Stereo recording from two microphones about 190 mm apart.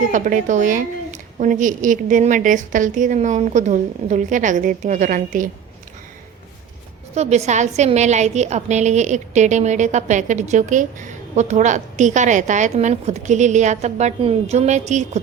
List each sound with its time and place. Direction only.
0.1 s a woman's voice: 40° right (ahead or behind)
7.1 s a woman's voice: 35° right (ahead or behind)